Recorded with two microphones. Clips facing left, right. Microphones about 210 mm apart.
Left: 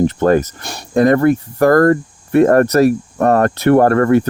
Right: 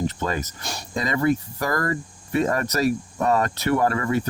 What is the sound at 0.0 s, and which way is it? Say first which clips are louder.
Speech: left 13 dB; 55° left (ahead or behind).